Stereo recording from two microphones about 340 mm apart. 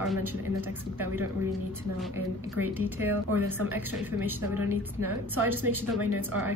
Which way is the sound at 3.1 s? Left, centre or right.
Right.